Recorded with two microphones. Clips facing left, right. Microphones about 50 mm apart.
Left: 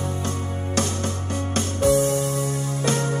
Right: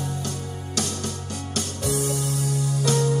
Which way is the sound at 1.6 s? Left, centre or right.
Left.